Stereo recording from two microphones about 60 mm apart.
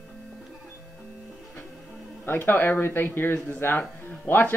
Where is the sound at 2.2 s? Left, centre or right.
Left.